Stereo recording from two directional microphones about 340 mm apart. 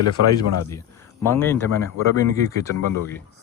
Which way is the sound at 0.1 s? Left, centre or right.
Left.